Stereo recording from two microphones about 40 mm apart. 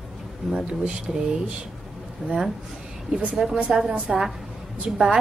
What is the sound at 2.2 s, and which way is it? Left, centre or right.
Speech, right.